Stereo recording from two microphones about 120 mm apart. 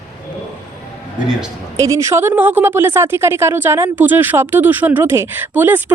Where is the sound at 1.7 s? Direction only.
25° right (ahead or behind).